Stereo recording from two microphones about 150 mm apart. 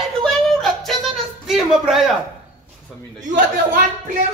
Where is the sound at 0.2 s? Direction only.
Centre (ahead or behind).